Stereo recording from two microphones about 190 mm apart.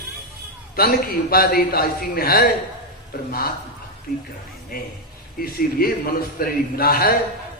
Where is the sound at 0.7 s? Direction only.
50° left (ahead or behind).